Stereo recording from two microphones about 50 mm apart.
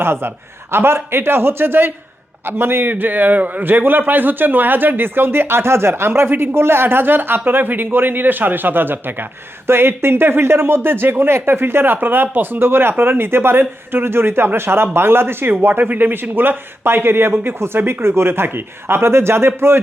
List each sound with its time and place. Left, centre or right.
0.0 s speech: right